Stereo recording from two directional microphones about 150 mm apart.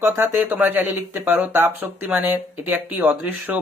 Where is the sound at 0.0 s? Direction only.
15° right (ahead or behind).